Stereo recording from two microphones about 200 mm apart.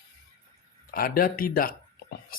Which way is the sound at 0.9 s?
45° left (ahead or behind).